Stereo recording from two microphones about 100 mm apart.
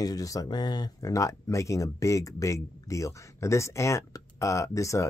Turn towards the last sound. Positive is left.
turn(degrees=30)  # may be behind; listen again after turning